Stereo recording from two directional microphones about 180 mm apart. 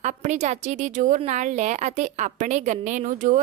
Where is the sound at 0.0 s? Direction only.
45° right (ahead or behind).